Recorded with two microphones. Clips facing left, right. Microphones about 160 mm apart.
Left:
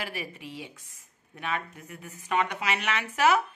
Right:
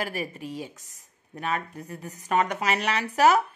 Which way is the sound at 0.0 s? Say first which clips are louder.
Right 5 dB; 40° right (ahead or behind).